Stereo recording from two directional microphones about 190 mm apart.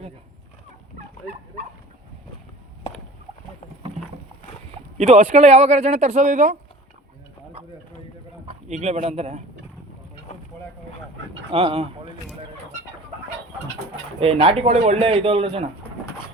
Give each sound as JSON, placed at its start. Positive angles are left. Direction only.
{"t": 4.9, "sound": "speech", "side_deg": -35}
{"t": 8.4, "sound": "speech", "side_deg": -35}
{"t": 11.5, "sound": "speech", "side_deg": -30}
{"t": 14.2, "sound": "a man's voice", "side_deg": -30}